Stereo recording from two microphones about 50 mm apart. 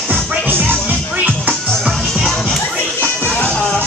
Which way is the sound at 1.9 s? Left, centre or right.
Centre.